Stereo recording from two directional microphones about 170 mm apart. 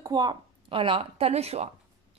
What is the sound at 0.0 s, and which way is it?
A woman's voice, 25° right (ahead or behind).